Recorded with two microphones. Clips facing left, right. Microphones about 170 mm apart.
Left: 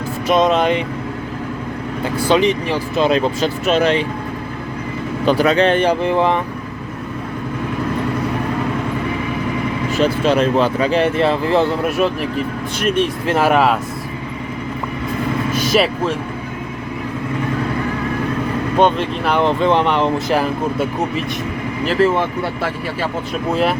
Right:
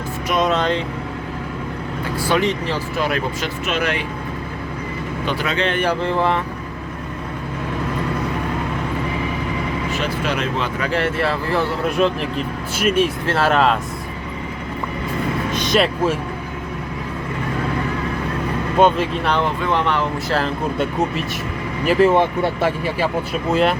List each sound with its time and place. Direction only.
0.3 s speech: 20° left (ahead or behind)
2.2 s speech: 20° left (ahead or behind)
3.0 s speech: 25° left (ahead or behind)
5.2 s speech: 40° left (ahead or behind)
5.8 s speech: 15° left (ahead or behind)
10.2 s speech: 30° left (ahead or behind)
10.8 s speech: 20° left (ahead or behind)
12.0 s speech: 5° left (ahead or behind)
12.8 s speech: 5° right (ahead or behind)
13.2 s speech: 15° left (ahead or behind)
15.5 s vehicle: 5° left (ahead or behind)
18.8 s speech: centre (ahead or behind)
19.4 s speech: 20° left (ahead or behind)
21.8 s speech: 15° right (ahead or behind)